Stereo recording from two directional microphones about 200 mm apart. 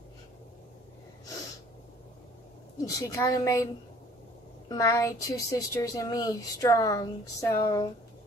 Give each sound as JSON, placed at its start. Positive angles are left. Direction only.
{"t": 3.0, "sound": "a woman's voice", "side_deg": 20}
{"t": 4.6, "sound": "a woman's voice", "side_deg": 15}